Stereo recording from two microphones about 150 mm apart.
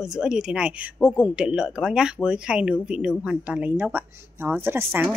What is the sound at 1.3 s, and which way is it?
Speech, 5° right (ahead or behind).